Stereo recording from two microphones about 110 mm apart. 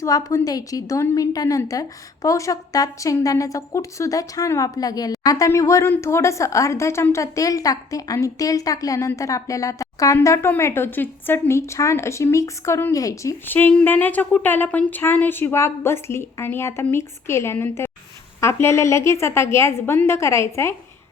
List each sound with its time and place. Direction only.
0.0 s a woman's voice: 30° left (ahead or behind)
13.5 s speech: 15° left (ahead or behind)